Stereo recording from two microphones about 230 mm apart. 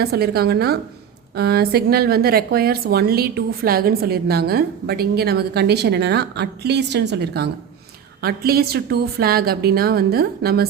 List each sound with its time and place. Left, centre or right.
0.0 s a woman's voice: right